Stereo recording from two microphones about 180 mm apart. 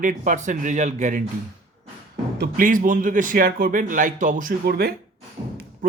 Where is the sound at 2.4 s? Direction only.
50° right (ahead or behind).